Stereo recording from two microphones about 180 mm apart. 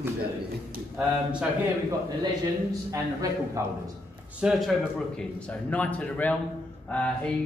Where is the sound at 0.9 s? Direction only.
5° right (ahead or behind).